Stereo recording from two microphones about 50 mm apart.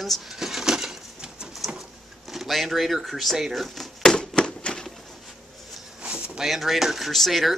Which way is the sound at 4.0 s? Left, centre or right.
Centre.